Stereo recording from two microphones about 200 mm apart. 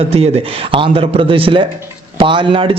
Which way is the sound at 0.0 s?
30° right (ahead or behind).